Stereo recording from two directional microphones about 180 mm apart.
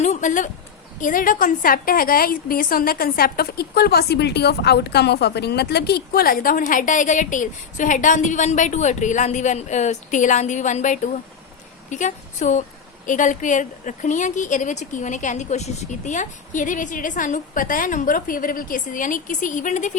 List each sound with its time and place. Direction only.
0.0 s a woman's voice: 40° left (ahead or behind)